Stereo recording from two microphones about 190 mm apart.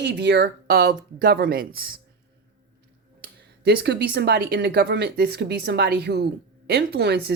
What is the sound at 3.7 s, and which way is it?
Speech, 60° right (ahead or behind).